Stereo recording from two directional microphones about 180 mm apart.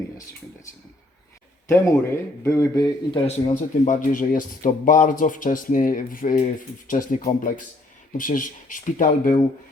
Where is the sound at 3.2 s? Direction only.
40° left (ahead or behind).